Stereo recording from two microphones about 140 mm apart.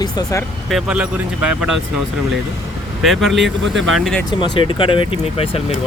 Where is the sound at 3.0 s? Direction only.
Centre (ahead or behind).